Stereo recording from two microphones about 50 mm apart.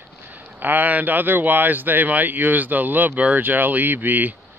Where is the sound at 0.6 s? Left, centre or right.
Right.